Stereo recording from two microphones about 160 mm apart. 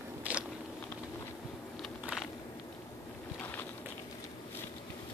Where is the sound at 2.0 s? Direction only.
Centre (ahead or behind).